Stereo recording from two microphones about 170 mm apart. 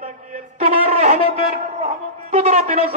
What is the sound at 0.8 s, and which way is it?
A man's voice, 40° right (ahead or behind).